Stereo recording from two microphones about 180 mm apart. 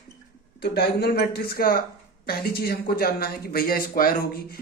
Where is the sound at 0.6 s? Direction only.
60° left (ahead or behind).